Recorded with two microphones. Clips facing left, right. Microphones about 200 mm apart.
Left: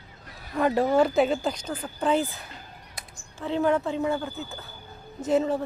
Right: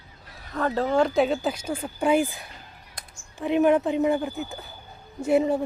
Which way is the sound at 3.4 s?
15° right (ahead or behind).